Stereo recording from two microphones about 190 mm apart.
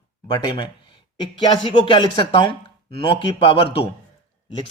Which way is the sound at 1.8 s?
25° left (ahead or behind).